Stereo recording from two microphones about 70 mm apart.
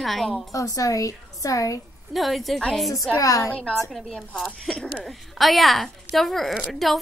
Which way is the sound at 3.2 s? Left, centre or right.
Left.